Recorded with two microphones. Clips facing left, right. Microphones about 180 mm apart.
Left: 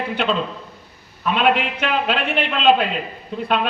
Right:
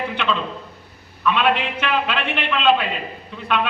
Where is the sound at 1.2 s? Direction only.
45° left (ahead or behind).